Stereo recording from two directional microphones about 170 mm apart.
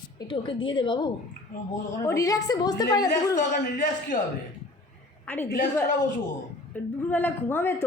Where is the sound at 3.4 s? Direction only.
50° left (ahead or behind).